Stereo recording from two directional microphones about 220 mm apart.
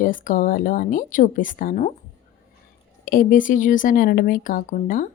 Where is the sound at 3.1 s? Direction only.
40° left (ahead or behind).